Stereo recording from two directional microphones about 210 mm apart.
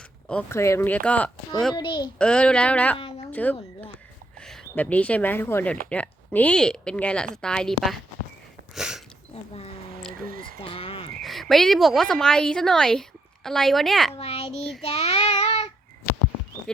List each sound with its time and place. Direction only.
0.3 s speech: 10° left (ahead or behind)
1.7 s a child's voice: 20° left (ahead or behind)
2.1 s a woman's voice: 5° left (ahead or behind)
8.7 s a sound: centre (ahead or behind)
10.2 s a sound: 40° right (ahead or behind)
10.6 s frog: 25° left (ahead or behind)
11.2 s a woman's voice: centre (ahead or behind)
14.2 s a child's voice: 30° left (ahead or behind)
14.8 s child singing: 25° left (ahead or behind)
16.7 s a sound: 5° left (ahead or behind)